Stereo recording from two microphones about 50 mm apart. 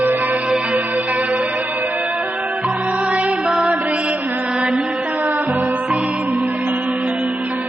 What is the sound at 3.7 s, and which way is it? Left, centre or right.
Mantra, right.